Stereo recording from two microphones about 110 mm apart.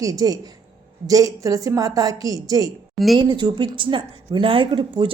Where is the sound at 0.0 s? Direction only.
30° right (ahead or behind).